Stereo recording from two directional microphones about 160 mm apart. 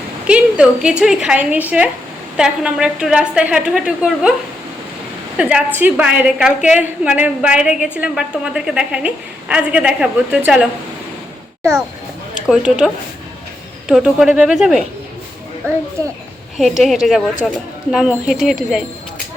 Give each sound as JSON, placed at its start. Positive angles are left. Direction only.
{"t": 0.3, "sound": "a woman's voice", "side_deg": -5}
{"t": 5.4, "sound": "a woman's voice", "side_deg": -5}
{"t": 12.5, "sound": "a woman's voice", "side_deg": -5}
{"t": 15.6, "sound": "a woman's voice", "side_deg": -15}
{"t": 16.6, "sound": "a woman's voice", "side_deg": 0}